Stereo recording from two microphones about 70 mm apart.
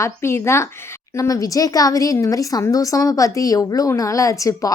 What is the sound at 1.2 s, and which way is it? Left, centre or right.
A woman's voice, left.